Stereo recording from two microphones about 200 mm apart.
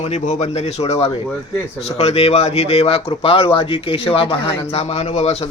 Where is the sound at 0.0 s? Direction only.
30° left (ahead or behind).